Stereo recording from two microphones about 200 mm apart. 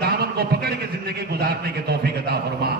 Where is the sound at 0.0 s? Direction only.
50° right (ahead or behind).